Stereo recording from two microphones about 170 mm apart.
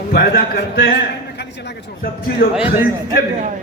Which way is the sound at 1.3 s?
90° left.